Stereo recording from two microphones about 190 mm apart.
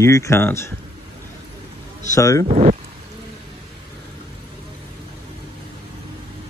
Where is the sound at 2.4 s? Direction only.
35° right (ahead or behind).